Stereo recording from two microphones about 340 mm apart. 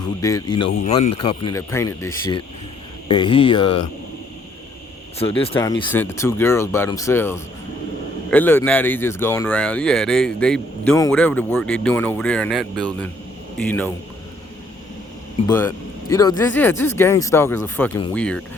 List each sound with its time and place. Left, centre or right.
0.2 s speech: centre
5.2 s speech: centre
15.4 s speech: centre